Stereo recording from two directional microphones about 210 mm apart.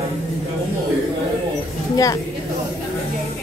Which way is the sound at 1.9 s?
15° left (ahead or behind).